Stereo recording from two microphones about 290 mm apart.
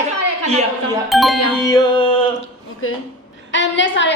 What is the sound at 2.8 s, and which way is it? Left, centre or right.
A woman's voice, left.